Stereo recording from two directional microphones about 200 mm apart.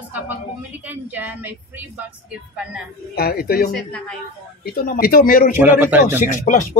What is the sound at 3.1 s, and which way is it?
Speech, 50° left (ahead or behind).